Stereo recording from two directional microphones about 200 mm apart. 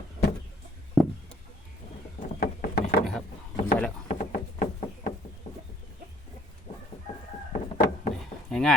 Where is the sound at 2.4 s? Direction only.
45° left (ahead or behind).